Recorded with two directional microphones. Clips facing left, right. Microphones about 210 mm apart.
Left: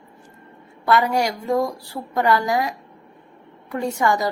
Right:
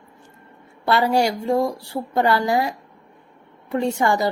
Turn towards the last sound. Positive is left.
turn(degrees=-30)  # may be behind; listen again after turning